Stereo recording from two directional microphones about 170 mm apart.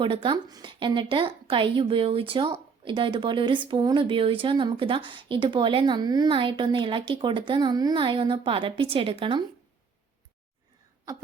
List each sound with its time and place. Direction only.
0.0 s a woman's voice: 30° right (ahead or behind)